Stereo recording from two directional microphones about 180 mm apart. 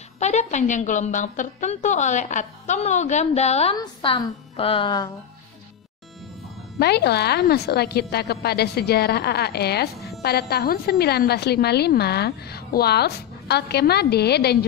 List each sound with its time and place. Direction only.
0.2 s a woman's voice: 40° left (ahead or behind)
3.7 s a woman's voice: 25° left (ahead or behind)
6.8 s a woman's voice: 65° left (ahead or behind)